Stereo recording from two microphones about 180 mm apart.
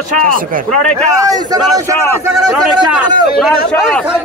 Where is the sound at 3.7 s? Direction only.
5° left (ahead or behind).